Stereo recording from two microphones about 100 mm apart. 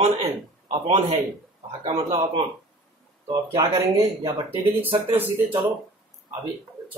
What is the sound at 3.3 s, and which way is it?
Speech, 30° right (ahead or behind).